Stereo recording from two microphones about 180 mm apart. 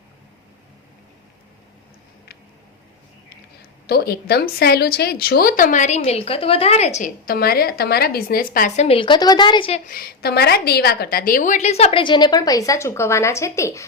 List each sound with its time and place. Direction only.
3.8 s speech: 60° left (ahead or behind); by 9.8 s 30° left (ahead or behind)
9.8 s a woman's voice: 55° left (ahead or behind); by 13.8 s 15° left (ahead or behind)